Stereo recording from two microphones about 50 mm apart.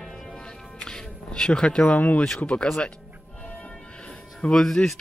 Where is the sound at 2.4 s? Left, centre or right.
Centre.